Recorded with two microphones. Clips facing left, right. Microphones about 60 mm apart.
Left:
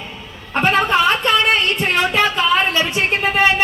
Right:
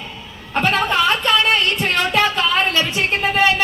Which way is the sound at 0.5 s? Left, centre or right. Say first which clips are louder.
Left 2 dB; left.